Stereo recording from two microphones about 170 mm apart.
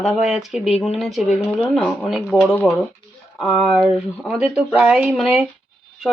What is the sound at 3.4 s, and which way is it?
A woman's voice, centre (ahead or behind).